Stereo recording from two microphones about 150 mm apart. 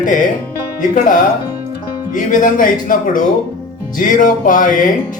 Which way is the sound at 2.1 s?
60° left (ahead or behind).